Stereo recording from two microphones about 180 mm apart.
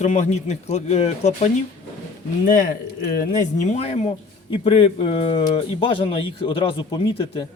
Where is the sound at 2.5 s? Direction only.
50° left (ahead or behind); by 7.5 s 30° left (ahead or behind).